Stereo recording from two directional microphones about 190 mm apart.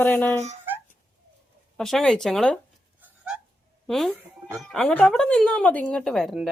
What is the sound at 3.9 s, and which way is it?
Speech, centre (ahead or behind).